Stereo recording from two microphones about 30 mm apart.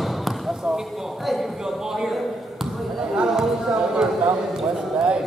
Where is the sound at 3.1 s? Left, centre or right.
Right.